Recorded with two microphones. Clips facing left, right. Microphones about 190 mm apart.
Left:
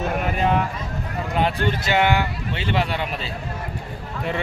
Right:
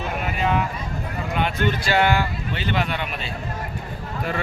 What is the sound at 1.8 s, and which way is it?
Speech, 20° left (ahead or behind).